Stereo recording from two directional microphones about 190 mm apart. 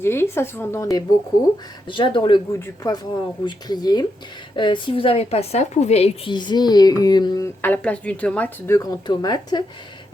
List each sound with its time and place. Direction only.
0.0 s a woman's voice: 10° left (ahead or behind)